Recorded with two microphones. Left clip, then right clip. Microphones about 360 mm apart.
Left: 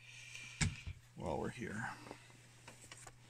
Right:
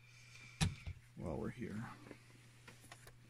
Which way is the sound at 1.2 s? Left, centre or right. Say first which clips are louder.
Left 4 dB; left.